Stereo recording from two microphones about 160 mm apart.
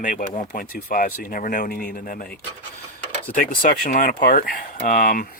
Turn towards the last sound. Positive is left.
turn(degrees=60)  # may be behind; listen again after turning